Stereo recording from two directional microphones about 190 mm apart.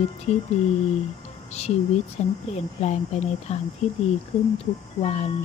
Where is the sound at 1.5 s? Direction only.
35° left (ahead or behind).